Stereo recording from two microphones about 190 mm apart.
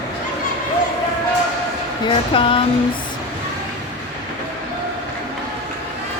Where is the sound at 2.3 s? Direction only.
25° left (ahead or behind).